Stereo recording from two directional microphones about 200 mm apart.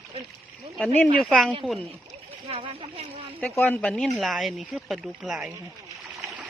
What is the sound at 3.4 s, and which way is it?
Speech, 5° left (ahead or behind).